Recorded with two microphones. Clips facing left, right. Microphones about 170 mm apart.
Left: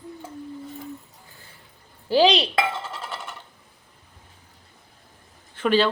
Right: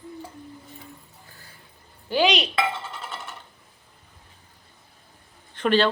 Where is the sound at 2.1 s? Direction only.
35° left (ahead or behind).